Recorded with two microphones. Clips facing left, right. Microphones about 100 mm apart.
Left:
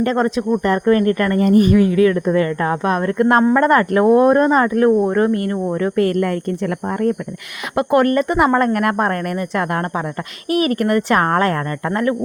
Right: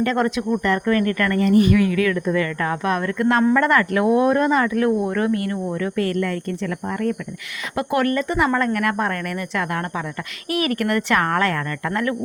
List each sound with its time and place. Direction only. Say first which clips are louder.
0.0 s speech: left 3 dB; 35° left (ahead or behind)
3.4 s speech: left 4 dB; 35° left (ahead or behind)
7.8 s a woman's voice: left 6 dB; 45° left (ahead or behind)
10.5 s speech: left 5 dB; 40° left (ahead or behind)